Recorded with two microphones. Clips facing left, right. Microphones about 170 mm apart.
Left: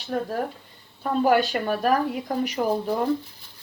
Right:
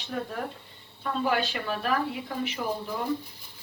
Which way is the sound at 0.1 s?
40° left (ahead or behind).